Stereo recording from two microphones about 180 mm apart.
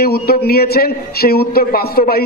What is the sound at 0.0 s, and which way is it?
A man's voice, 60° left (ahead or behind).